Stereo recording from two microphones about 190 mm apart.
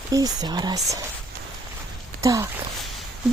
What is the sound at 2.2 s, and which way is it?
Speech, 15° right (ahead or behind).